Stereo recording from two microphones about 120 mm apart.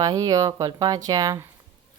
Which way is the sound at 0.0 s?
30° right (ahead or behind).